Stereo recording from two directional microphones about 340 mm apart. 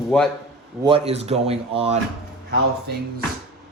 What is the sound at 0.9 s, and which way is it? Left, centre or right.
Speech, centre.